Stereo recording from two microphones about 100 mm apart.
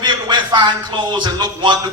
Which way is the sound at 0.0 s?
50° right (ahead or behind).